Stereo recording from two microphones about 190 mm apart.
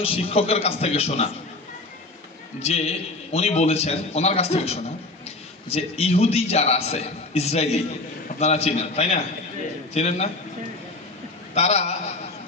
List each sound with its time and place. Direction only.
0.0 s a man's voice: 30° left (ahead or behind)
2.6 s a man's voice: 35° left (ahead or behind)
11.5 s a man's voice: 35° left (ahead or behind)